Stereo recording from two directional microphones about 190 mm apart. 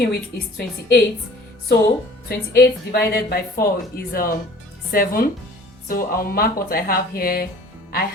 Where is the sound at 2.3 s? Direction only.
55° left (ahead or behind).